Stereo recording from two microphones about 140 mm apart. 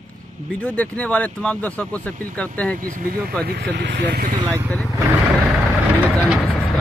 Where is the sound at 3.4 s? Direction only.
90° right.